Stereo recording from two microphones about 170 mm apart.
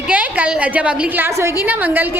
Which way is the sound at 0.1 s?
10° right (ahead or behind).